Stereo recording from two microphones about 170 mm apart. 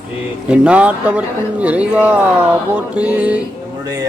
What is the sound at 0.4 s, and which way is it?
Speech, 5° right (ahead or behind).